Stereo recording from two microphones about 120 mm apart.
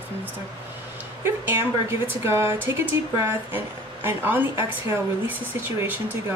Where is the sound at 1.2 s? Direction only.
20° right (ahead or behind).